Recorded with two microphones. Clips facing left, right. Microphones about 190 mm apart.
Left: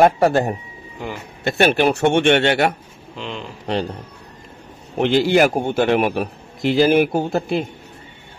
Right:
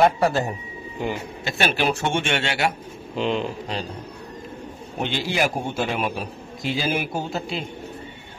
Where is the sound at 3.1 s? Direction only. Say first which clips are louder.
Right 7 dB; 15° right (ahead or behind).